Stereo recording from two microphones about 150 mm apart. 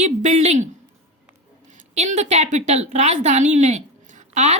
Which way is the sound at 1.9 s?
50° right (ahead or behind).